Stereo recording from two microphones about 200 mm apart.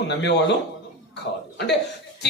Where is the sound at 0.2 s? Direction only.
60° left (ahead or behind).